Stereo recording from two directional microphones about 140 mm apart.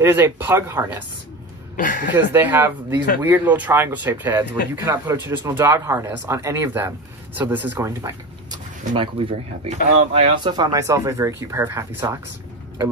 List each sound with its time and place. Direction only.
0.0 s speech: 15° right (ahead or behind)
1.8 s speech: 70° left (ahead or behind)
2.1 s speech: 15° right (ahead or behind)
8.0 s a sound: 35° right (ahead or behind)
9.7 s speech: 55° right (ahead or behind)
10.4 s speech: 30° right (ahead or behind)